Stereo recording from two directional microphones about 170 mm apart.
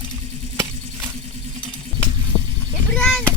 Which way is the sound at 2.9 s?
5° left (ahead or behind).